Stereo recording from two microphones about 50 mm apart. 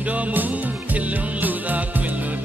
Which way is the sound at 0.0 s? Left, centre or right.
Right.